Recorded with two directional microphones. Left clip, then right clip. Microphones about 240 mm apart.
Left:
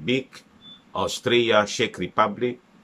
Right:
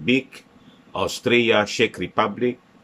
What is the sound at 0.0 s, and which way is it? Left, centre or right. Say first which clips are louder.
Speech: right 4 dB; centre.